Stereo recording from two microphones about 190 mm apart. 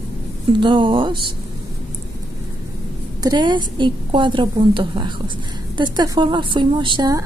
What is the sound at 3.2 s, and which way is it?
Speech, 25° right (ahead or behind).